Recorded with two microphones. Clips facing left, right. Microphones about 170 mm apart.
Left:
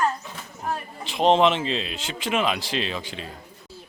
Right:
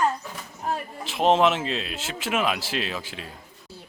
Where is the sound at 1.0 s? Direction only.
5° right (ahead or behind).